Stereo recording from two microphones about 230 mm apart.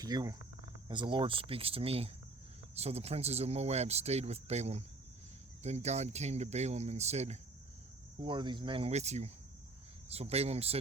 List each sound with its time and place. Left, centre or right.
0.0 s cricket: centre
0.9 s speech: centre